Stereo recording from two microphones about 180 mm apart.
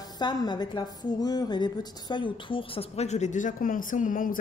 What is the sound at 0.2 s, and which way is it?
A woman's voice, 25° left (ahead or behind).